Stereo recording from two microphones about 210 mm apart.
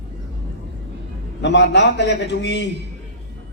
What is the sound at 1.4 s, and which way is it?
A man's voice, 55° left (ahead or behind).